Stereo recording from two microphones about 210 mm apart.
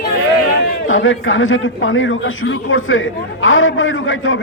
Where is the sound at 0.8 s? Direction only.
70° left (ahead or behind).